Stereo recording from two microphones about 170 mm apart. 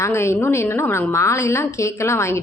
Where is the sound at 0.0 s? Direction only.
15° left (ahead or behind).